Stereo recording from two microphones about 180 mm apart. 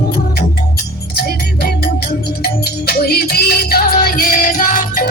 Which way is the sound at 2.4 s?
60° left (ahead or behind).